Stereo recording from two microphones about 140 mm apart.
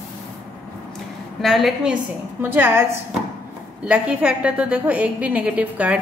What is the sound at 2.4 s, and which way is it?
A woman's voice, 15° right (ahead or behind).